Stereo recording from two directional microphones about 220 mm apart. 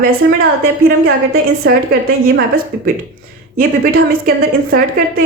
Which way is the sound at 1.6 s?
50° right (ahead or behind).